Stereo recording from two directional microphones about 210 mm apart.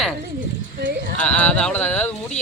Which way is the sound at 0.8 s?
50° right (ahead or behind).